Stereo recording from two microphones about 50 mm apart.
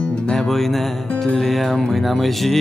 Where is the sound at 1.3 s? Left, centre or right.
Centre.